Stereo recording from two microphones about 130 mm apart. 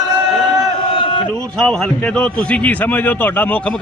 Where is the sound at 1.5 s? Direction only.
5° left (ahead or behind).